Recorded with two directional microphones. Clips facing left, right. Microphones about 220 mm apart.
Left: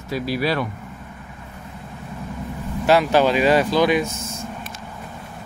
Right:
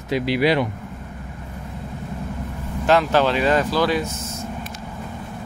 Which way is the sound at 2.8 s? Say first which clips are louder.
Left 1 dB; 10° left (ahead or behind).